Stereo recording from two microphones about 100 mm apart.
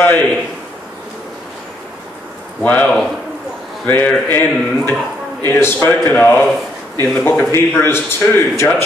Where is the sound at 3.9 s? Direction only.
15° left (ahead or behind).